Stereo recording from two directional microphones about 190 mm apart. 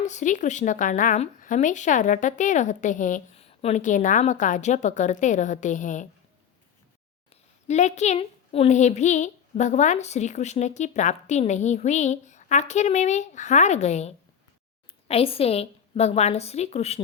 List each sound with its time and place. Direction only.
0.0 s a woman's voice: 40° left (ahead or behind)
7.7 s a woman's voice: 35° left (ahead or behind)